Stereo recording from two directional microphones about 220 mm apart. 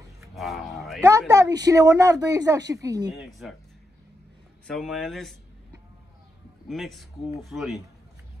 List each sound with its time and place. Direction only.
0.2 s a sound: centre (ahead or behind)
1.0 s speech: 15° right (ahead or behind)
3.1 s speech: centre (ahead or behind)
4.6 s speech: centre (ahead or behind)
6.7 s speech: centre (ahead or behind)